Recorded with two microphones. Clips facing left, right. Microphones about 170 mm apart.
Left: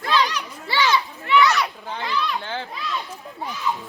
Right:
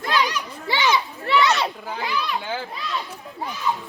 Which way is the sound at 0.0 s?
15° right (ahead or behind).